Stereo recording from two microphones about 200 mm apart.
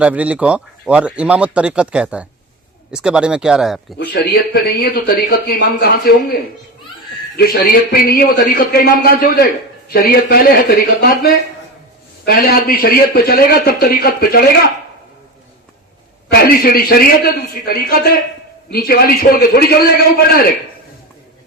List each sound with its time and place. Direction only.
0.0 s speech: 5° right (ahead or behind)
3.9 s a man's voice: 55° left (ahead or behind)
7.3 s a man's voice: 50° left (ahead or behind)
16.3 s a man's voice: 50° left (ahead or behind)